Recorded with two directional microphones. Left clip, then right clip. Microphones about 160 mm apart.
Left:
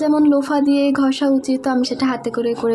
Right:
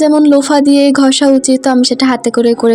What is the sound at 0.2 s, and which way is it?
Speech, 30° right (ahead or behind).